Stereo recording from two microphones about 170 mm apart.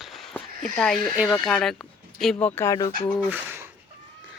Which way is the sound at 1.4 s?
Centre (ahead or behind).